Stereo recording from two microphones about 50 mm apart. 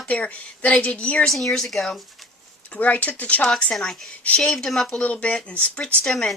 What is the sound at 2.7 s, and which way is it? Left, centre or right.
Speech, left.